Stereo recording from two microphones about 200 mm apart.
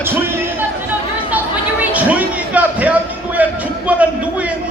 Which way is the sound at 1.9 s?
5° right (ahead or behind).